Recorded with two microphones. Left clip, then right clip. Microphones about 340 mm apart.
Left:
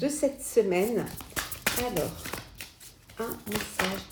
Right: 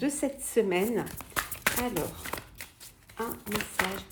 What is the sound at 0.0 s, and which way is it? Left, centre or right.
Speech, right.